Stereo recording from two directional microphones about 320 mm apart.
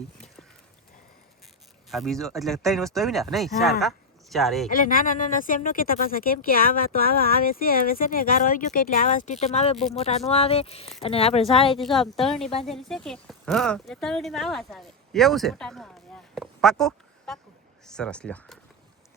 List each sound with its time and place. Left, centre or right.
1.9 s a woman's voice: centre
4.7 s speech: left
11.8 s a woman's voice: centre
16.3 s a sound: centre
17.8 s speech: centre